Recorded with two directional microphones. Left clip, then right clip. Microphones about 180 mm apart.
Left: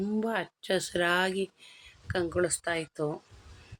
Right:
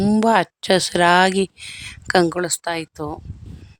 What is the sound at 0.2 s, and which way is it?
Speech, 75° right (ahead or behind).